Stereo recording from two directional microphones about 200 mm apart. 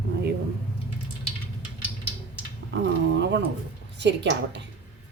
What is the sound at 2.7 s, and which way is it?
Speech, 60° right (ahead or behind).